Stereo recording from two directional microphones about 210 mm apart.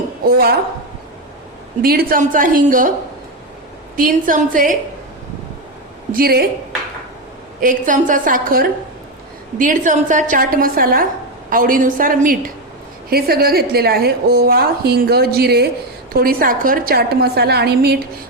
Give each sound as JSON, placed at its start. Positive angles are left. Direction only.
{"t": 0.3, "sound": "a woman's voice", "side_deg": -45}
{"t": 1.8, "sound": "a woman's voice", "side_deg": -45}
{"t": 3.9, "sound": "a woman's voice", "side_deg": -40}
{"t": 6.1, "sound": "a woman's voice", "side_deg": -45}
{"t": 7.6, "sound": "a woman's voice", "side_deg": -40}